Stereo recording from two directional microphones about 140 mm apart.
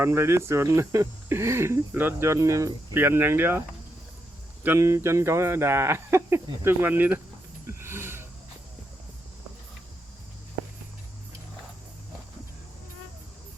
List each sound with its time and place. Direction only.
0.0 s speech: 20° right (ahead or behind)
4.6 s speech: 15° right (ahead or behind)
7.7 s a sound: 15° right (ahead or behind)